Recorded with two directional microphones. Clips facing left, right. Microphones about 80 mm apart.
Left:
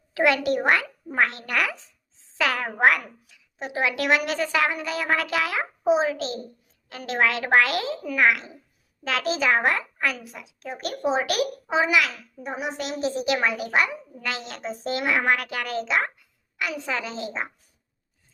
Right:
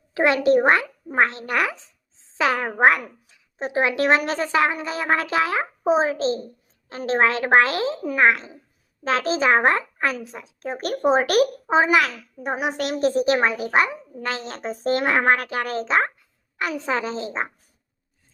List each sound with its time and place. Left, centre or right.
0.1 s a child's voice: right
12.4 s a woman's voice: right
13.2 s a child's voice: right